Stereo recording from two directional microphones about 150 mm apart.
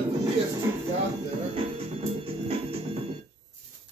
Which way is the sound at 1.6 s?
40° right (ahead or behind).